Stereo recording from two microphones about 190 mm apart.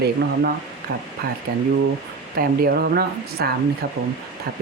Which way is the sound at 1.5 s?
50° right (ahead or behind).